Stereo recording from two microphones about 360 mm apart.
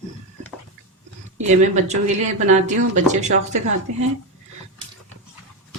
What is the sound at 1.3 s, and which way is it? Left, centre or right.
Speech, centre.